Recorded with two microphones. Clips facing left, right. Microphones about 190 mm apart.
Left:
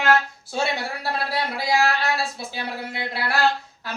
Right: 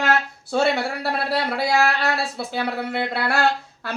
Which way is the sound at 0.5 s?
60° right (ahead or behind).